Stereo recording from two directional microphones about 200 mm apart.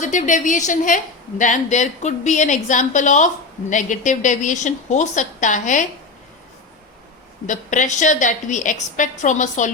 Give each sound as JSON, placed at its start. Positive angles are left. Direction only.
{"t": 0.0, "sound": "a woman's voice", "side_deg": 35}
{"t": 7.4, "sound": "a woman's voice", "side_deg": 40}